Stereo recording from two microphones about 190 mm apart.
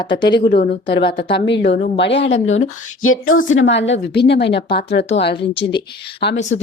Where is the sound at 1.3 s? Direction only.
65° left (ahead or behind).